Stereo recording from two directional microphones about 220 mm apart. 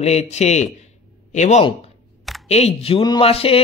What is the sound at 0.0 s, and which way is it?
Speech, 30° left (ahead or behind).